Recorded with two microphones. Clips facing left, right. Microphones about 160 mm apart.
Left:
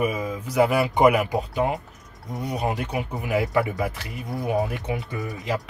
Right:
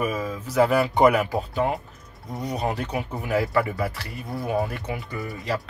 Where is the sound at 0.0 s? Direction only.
15° left (ahead or behind).